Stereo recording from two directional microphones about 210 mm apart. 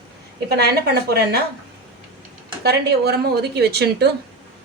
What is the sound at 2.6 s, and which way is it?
Speech, 50° right (ahead or behind).